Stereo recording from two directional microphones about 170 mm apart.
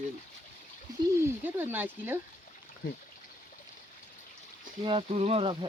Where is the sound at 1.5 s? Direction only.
10° right (ahead or behind).